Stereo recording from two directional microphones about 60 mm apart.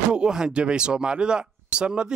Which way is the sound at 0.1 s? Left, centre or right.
Centre.